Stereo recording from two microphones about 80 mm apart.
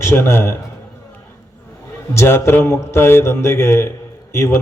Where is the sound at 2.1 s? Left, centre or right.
Left.